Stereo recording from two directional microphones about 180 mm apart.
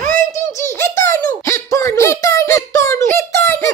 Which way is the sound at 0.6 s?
15° left (ahead or behind).